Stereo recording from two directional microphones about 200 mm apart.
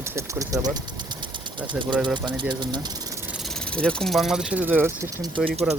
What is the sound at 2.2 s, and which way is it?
Speech, 20° right (ahead or behind).